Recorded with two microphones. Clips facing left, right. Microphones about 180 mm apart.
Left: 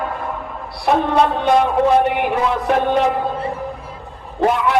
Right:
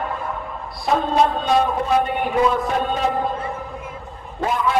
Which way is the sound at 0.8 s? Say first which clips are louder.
Left 3 dB; 70° left (ahead or behind).